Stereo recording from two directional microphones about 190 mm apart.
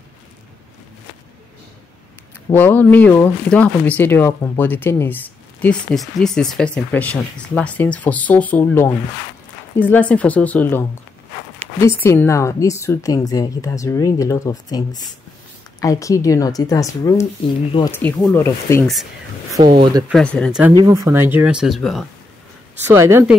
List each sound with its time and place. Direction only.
2.5 s speech: 10° left (ahead or behind)
12.0 s speech: 15° left (ahead or behind)
17.9 s speech: 10° left (ahead or behind)
19.8 s speech: 20° right (ahead or behind)
20.1 s speech: 5° left (ahead or behind)
20.8 s speech: 15° right (ahead or behind)
22.8 s speech: 15° right (ahead or behind)